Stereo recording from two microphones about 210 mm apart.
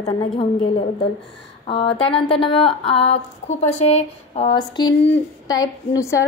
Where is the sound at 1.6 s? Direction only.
25° left (ahead or behind).